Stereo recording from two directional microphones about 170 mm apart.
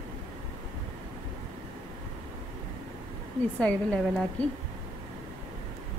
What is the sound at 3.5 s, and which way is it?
Speech, 5° left (ahead or behind).